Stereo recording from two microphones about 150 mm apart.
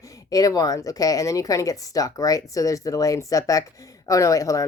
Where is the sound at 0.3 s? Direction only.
25° left (ahead or behind).